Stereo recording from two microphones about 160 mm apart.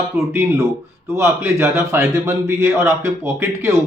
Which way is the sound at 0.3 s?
15° right (ahead or behind).